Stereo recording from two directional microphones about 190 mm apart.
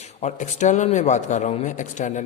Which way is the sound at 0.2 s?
40° left (ahead or behind).